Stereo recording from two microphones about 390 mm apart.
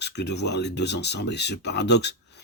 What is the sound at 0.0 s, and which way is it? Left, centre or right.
Speech, left.